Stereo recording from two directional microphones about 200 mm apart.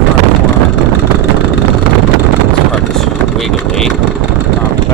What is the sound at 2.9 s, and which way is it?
Vehicle, centre (ahead or behind).